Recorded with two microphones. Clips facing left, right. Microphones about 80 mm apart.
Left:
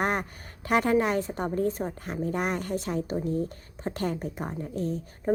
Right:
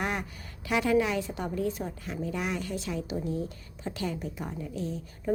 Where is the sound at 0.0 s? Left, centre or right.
Left.